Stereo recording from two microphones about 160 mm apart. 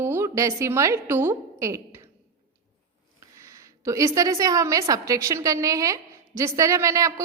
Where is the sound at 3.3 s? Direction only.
20° right (ahead or behind).